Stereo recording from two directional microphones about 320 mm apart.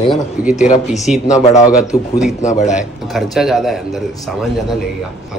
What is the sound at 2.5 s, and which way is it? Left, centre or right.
Speech, left.